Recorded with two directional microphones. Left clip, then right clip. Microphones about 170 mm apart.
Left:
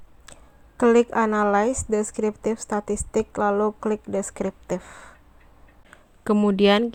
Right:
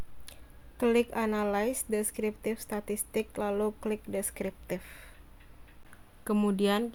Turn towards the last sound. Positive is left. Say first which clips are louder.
# left 10 dB
turn(degrees=30)  # may be behind; listen again after turning